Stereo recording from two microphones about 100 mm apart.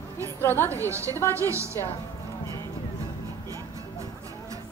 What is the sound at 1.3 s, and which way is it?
Speech, 30° right (ahead or behind).